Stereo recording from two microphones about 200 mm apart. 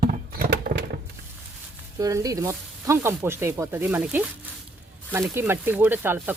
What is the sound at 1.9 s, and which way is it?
Speech, 15° right (ahead or behind).